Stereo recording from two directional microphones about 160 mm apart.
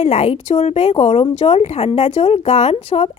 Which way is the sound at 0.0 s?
45° left (ahead or behind).